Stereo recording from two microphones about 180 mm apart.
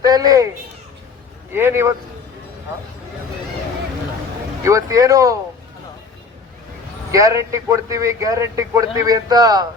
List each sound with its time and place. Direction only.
0.0 s a child's voice: 20° right (ahead or behind)
1.5 s a man's voice: 15° right (ahead or behind)
4.6 s a man's voice: 20° right (ahead or behind)
7.1 s a man's voice: 15° right (ahead or behind)